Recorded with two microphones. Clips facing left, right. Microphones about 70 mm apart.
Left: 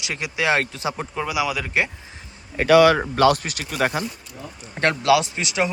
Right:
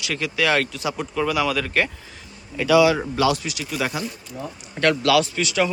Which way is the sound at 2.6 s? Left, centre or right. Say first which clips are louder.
Left 2 dB; left.